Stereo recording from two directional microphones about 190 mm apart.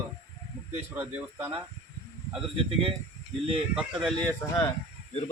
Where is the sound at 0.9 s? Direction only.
10° right (ahead or behind).